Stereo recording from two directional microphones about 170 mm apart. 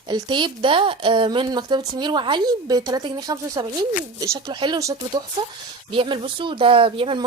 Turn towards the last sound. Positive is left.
turn(degrees=-30)  # may be behind; listen again after turning